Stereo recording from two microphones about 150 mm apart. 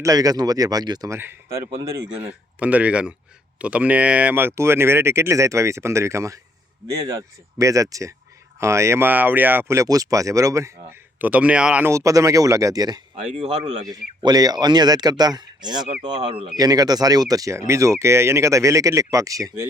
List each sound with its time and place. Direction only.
0.0 s speech: 25° right (ahead or behind)
11.2 s speech: 10° right (ahead or behind); by 13.0 s 25° right (ahead or behind)
13.4 s speech: 45° right (ahead or behind)
14.2 s speech: 25° right (ahead or behind)
16.6 s speech: 25° right (ahead or behind)